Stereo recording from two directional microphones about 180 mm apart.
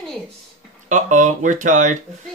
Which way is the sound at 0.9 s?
45° right (ahead or behind).